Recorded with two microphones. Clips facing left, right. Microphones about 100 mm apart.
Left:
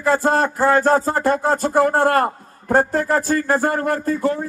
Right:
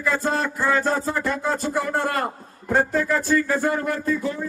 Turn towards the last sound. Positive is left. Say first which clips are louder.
# left 2 dB
turn(degrees=35)  # may be behind; listen again after turning